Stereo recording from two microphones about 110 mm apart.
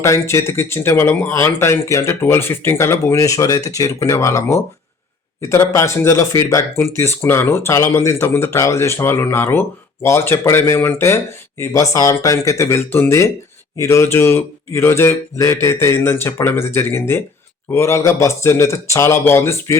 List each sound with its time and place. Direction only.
0.0 s speech: 25° left (ahead or behind)